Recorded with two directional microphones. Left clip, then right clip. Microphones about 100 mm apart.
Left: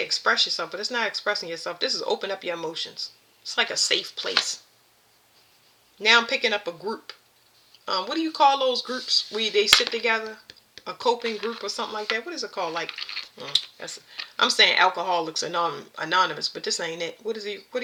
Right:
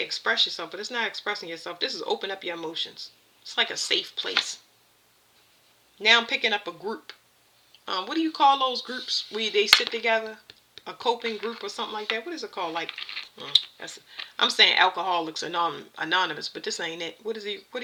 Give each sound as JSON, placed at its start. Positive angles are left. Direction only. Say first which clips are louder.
{"t": 0.0, "sound": "speech", "louder": "left 2 dB", "side_deg": -25}
{"t": 6.0, "sound": "speech", "louder": "left 1 dB", "side_deg": -30}
{"t": 11.3, "sound": "speech", "louder": "left 2 dB", "side_deg": -15}
{"t": 11.6, "sound": "speech", "louder": "left 2 dB", "side_deg": -30}